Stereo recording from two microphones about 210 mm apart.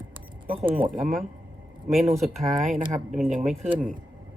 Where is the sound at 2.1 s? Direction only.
Centre (ahead or behind).